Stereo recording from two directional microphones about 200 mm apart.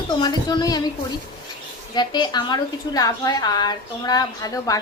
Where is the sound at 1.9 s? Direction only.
20° left (ahead or behind).